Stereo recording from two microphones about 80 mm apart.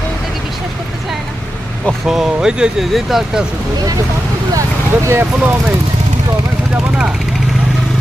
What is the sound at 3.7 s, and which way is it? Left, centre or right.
Speech, right.